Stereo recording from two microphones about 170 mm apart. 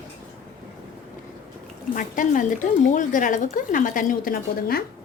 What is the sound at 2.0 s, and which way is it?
A woman's voice, 50° left (ahead or behind).